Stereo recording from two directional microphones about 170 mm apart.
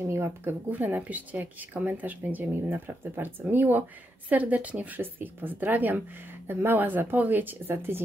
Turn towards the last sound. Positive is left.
turn(degrees=-15)  # may be behind; listen again after turning